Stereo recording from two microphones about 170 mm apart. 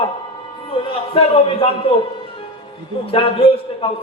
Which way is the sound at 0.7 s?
30° left (ahead or behind).